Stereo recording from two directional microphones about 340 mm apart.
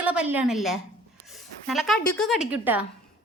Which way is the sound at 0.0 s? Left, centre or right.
Centre.